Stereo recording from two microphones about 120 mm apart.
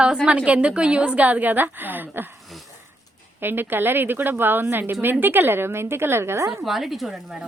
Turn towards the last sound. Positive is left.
turn(degrees=0)  # may be behind; listen again after turning